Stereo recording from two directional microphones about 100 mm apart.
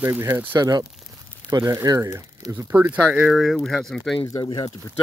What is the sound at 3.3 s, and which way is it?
Speech, centre (ahead or behind).